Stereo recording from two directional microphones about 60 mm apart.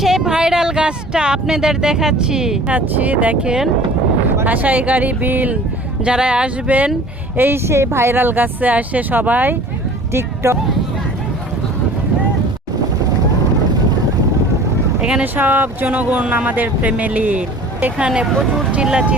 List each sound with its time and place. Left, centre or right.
0.0 s speech: centre
2.7 s speech: right
6.1 s speech: centre
7.3 s speech: right
10.1 s speech: right
15.2 s speech: right
17.9 s speech: centre